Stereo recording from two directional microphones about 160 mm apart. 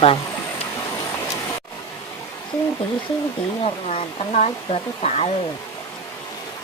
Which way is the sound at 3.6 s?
40° left (ahead or behind).